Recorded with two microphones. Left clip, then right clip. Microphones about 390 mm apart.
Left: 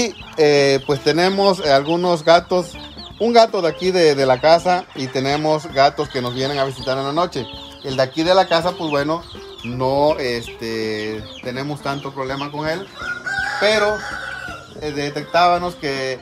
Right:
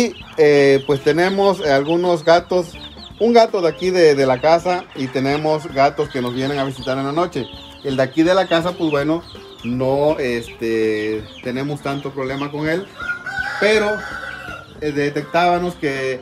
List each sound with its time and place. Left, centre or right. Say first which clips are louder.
0.0 s speech: right 2 dB; left
14.9 s speech: right 3 dB; centre